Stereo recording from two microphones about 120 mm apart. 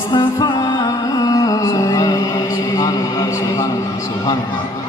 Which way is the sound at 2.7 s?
30° left (ahead or behind).